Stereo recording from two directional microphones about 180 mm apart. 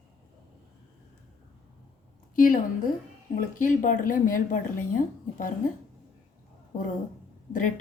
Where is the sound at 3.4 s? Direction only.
45° left (ahead or behind).